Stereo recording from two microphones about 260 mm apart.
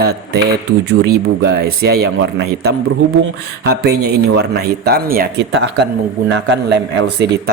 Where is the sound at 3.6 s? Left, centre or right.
Right.